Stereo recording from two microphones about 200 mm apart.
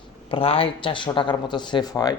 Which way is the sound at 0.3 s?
30° left (ahead or behind).